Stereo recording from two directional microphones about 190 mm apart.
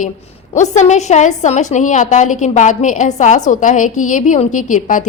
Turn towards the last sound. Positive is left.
turn(degrees=45)  # may be behind; listen again after turning